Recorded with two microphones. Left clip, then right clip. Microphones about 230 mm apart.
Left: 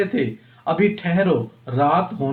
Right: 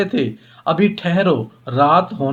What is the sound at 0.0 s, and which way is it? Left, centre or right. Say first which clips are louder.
Speech: right 2 dB; right.